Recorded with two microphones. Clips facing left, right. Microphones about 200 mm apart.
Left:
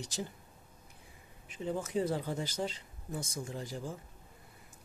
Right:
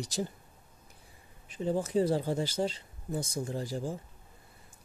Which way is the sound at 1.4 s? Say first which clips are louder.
Right 5 dB; 35° right (ahead or behind).